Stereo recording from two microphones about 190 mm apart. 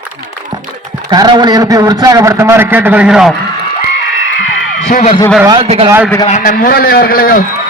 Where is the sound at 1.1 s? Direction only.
20° right (ahead or behind); by 3.3 s 5° right (ahead or behind).